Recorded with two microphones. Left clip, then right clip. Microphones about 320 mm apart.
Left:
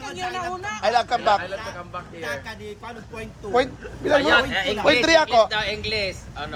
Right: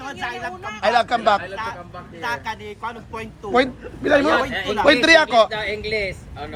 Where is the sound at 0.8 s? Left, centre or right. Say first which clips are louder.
Right 3 dB; right.